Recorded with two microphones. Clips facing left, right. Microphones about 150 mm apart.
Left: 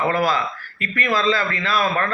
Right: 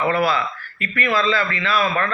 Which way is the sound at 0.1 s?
40° left (ahead or behind).